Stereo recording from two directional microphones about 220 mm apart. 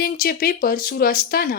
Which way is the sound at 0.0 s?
40° left (ahead or behind).